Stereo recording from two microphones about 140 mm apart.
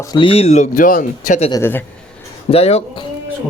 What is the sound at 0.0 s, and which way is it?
Speech, 30° left (ahead or behind).